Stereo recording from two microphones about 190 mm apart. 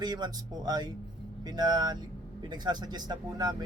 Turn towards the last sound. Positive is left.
turn(degrees=-20)  # may be behind; listen again after turning